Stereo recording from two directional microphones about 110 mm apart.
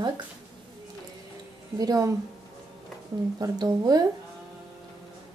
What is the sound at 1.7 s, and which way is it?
Speech, 35° right (ahead or behind).